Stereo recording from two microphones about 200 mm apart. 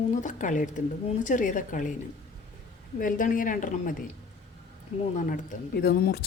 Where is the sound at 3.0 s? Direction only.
40° left (ahead or behind).